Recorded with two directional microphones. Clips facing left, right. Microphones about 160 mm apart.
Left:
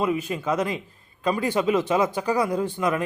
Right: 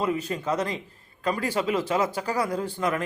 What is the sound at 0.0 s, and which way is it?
Speech, 10° left (ahead or behind).